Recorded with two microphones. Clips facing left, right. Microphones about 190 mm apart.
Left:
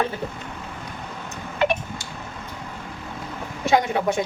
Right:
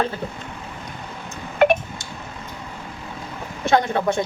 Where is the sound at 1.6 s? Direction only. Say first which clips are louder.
Right 6 dB; 55° right (ahead or behind).